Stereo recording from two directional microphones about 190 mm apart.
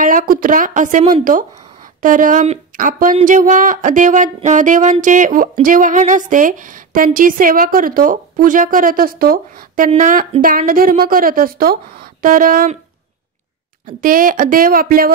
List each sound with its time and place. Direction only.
0.0 s speech: 45° right (ahead or behind)
14.0 s speech: 45° right (ahead or behind)